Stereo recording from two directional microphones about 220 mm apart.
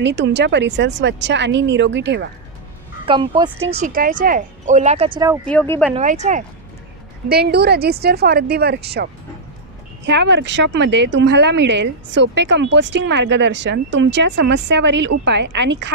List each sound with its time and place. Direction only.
0.0 s a woman's voice: 50° right (ahead or behind)
3.1 s speech: 20° right (ahead or behind)
3.7 s speech: 40° right (ahead or behind)
5.4 s speech: 5° left (ahead or behind)
5.9 s speech: 30° right (ahead or behind)
7.2 s a woman's voice: 45° right (ahead or behind)